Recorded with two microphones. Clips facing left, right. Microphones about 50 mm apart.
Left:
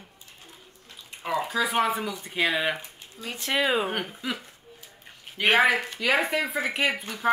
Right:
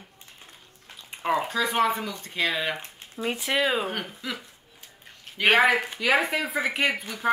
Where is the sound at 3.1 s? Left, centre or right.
Right.